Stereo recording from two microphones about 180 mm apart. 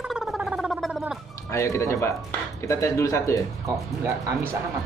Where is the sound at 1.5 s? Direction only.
15° left (ahead or behind).